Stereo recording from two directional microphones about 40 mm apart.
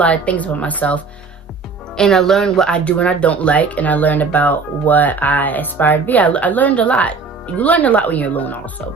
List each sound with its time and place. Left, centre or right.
0.0 s speech: left
2.0 s speech: centre
2.6 s speech: left
6.2 s speech: left